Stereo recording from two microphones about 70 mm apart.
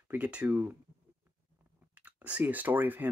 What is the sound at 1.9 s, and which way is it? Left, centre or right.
Speech, centre.